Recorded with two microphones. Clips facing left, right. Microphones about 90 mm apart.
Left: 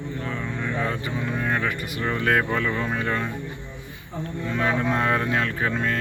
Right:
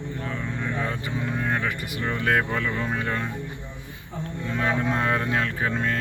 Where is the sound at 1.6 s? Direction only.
20° right (ahead or behind).